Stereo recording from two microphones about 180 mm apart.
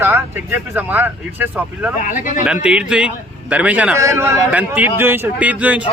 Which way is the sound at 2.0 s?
45° left (ahead or behind).